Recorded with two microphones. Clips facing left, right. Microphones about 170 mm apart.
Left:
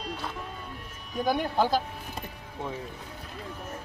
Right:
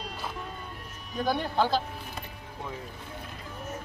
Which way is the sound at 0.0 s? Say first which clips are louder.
Left 2 dB; centre (ahead or behind).